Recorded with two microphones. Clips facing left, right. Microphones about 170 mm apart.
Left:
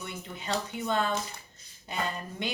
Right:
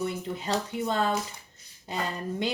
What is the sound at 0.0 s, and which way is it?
A woman's voice, 35° right (ahead or behind).